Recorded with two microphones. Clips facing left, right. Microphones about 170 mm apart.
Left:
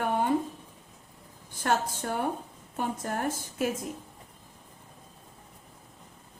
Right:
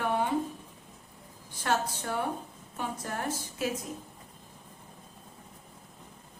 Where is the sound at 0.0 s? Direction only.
50° left (ahead or behind).